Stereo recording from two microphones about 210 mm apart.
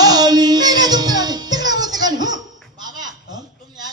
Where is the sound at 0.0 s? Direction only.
20° right (ahead or behind).